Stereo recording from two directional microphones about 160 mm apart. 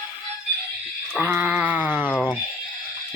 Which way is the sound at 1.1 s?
10° right (ahead or behind).